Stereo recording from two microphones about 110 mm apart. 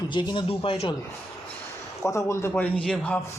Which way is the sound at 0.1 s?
45° left (ahead or behind).